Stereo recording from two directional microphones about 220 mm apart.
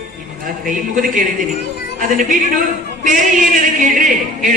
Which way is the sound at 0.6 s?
35° right (ahead or behind).